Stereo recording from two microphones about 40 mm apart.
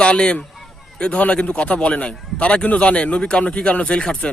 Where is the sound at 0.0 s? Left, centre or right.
Left.